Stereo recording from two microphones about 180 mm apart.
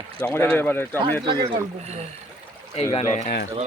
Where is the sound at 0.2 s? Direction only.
5° left (ahead or behind).